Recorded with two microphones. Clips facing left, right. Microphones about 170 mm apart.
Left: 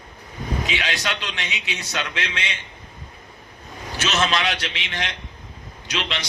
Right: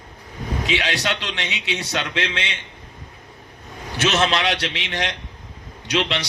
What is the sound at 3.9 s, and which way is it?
Speech, 60° right (ahead or behind).